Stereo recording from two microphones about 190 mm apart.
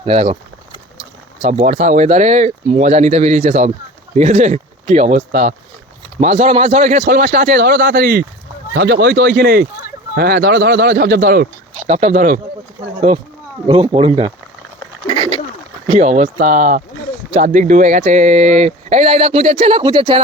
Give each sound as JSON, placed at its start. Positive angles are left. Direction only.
{"t": 0.0, "sound": "speech", "side_deg": -30}
{"t": 11.9, "sound": "speech", "side_deg": -35}
{"t": 13.7, "sound": "speech", "side_deg": -30}
{"t": 15.1, "sound": "bird", "side_deg": -25}
{"t": 16.0, "sound": "speech", "side_deg": -40}